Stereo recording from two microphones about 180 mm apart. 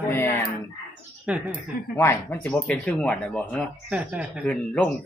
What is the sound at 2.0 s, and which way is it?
Speech, 10° left (ahead or behind).